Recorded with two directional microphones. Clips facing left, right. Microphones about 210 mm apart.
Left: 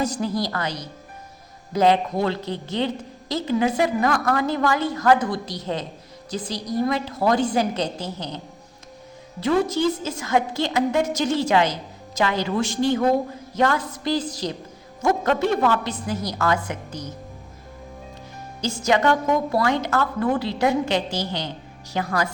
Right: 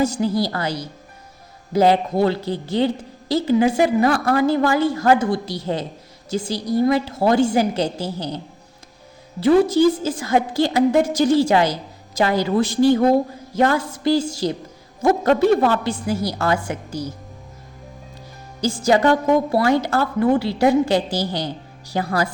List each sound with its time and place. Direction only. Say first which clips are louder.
0.0 s a woman's voice: right 5 dB; 30° right (ahead or behind)
9.4 s a woman's voice: right 6 dB; 30° right (ahead or behind)
18.6 s a woman's voice: right 4 dB; 30° right (ahead or behind)